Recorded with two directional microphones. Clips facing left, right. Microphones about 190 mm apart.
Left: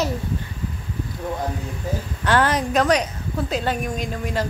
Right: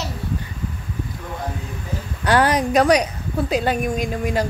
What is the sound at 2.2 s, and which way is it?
A woman's voice, 10° right (ahead or behind).